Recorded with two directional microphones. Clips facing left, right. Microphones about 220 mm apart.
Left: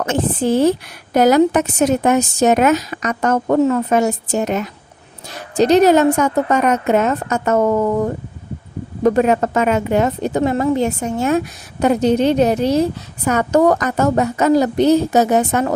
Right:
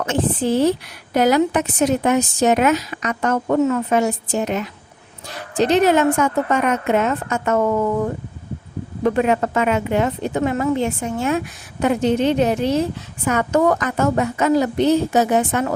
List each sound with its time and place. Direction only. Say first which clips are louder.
0.0 s a woman's voice: left 2 dB; 45° left (ahead or behind)